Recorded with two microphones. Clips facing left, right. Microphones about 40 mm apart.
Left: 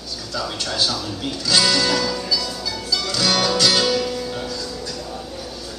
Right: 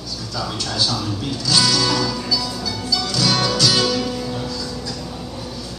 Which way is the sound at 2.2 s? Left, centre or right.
Centre.